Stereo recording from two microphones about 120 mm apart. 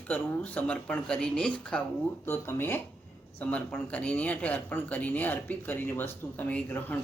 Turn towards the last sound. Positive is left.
turn(degrees=15)  # may be behind; listen again after turning